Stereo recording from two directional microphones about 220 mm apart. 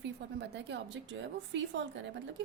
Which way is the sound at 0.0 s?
50° right (ahead or behind).